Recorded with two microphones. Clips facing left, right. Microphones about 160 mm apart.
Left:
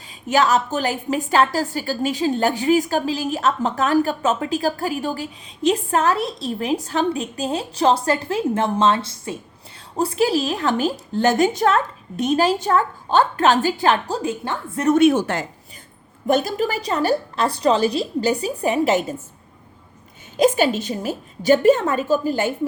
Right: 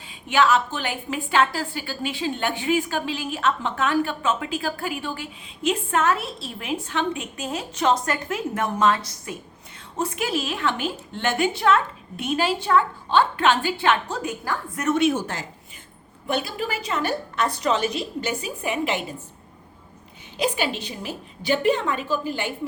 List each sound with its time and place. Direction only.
0.1 s a woman's voice: 40° left (ahead or behind)
14.8 s a woman's voice: 50° left (ahead or behind)
15.1 s speech: 85° left
16.2 s a woman's voice: 45° left (ahead or behind)
20.3 s a woman's voice: 45° left (ahead or behind)